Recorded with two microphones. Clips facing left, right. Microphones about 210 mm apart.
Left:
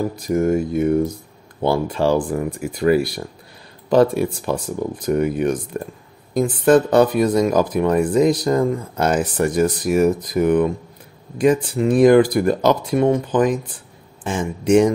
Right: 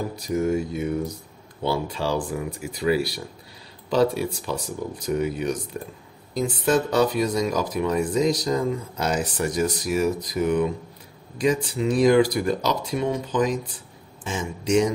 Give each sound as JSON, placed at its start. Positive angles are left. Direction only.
{"t": 0.1, "sound": "speech", "side_deg": 50}